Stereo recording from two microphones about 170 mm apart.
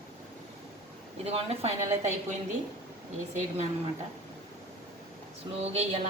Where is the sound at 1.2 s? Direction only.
35° right (ahead or behind).